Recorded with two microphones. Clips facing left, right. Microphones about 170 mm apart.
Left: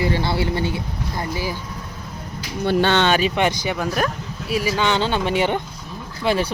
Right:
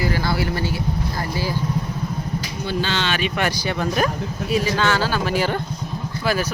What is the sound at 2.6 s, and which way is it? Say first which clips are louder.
Speech: left 7 dB; 60° left (ahead or behind).